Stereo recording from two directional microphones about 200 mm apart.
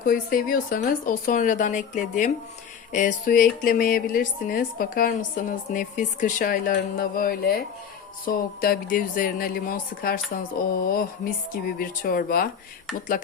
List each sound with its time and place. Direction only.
0.0 s speech: 45° left (ahead or behind)